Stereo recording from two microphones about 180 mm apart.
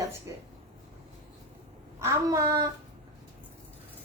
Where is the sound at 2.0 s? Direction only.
15° right (ahead or behind).